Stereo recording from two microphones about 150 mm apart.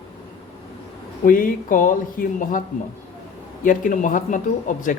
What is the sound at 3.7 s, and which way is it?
Speech, 60° left (ahead or behind).